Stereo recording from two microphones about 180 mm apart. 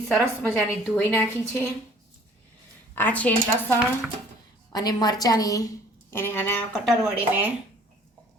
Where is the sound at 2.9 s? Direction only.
10° left (ahead or behind).